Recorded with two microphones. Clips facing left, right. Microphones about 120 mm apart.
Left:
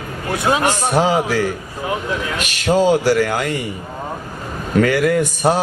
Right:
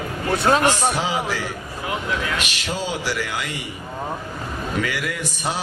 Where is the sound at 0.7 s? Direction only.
45° left (ahead or behind).